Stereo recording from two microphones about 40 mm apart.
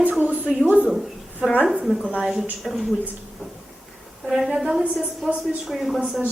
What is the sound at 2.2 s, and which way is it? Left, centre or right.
Speech, centre.